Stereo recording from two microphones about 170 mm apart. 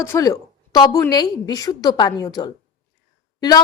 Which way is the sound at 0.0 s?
20° left (ahead or behind).